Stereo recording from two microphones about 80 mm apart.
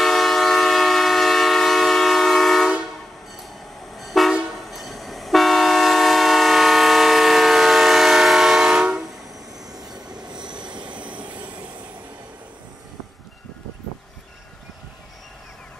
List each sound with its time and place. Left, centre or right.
0.0 s train: centre
3.9 s vehicle: centre
9.9 s train: right
10.4 s vehicle: centre
10.9 s train: centre